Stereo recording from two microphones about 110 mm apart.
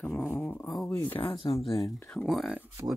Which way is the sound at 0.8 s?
15° left (ahead or behind).